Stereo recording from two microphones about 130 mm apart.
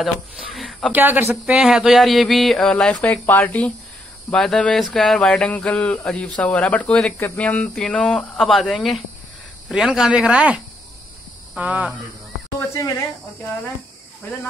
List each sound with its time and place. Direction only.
0.0 s speech: centre (ahead or behind)
0.9 s speech: 15° right (ahead or behind)
1.3 s a sound: 5° right (ahead or behind)
4.8 s speech: centre (ahead or behind)
7.3 s a sound: 10° left (ahead or behind); by 10.6 s 10° right (ahead or behind)
11.5 s speech: 10° right (ahead or behind)
12.5 s speech: 20° left (ahead or behind)